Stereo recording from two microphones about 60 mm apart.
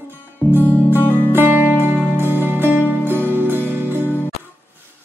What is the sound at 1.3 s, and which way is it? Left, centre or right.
Music, right.